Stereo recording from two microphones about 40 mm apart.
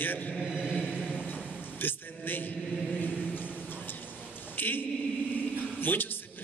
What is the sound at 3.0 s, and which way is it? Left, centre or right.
Chant, left.